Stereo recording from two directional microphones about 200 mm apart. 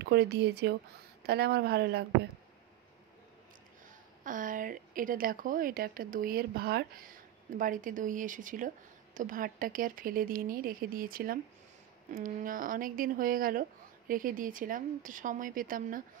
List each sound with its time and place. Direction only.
0.0 s speech: 55° right (ahead or behind)
4.2 s speech: 40° right (ahead or behind)